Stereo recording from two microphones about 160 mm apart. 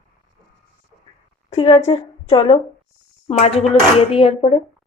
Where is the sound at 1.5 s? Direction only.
40° left (ahead or behind).